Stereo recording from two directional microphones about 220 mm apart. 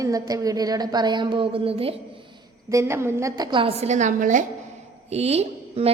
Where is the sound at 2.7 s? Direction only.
10° right (ahead or behind).